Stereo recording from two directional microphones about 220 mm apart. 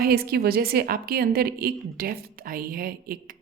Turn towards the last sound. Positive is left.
turn(degrees=-40)  # may be behind; listen again after turning